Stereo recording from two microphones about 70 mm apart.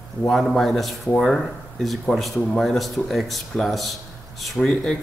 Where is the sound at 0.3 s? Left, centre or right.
Centre.